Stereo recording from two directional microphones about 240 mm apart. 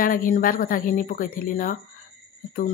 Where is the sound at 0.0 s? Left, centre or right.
Left.